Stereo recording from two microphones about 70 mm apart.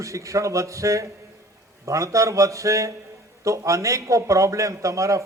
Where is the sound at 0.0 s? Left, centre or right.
Right.